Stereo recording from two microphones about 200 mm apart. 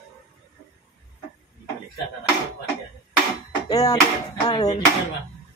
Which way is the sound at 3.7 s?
15° left (ahead or behind).